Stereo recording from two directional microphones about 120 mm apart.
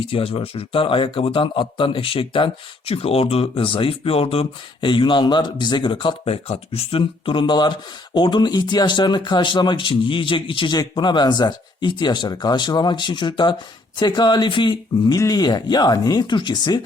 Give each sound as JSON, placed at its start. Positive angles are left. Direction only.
{"t": 0.1, "sound": "speech", "side_deg": 50}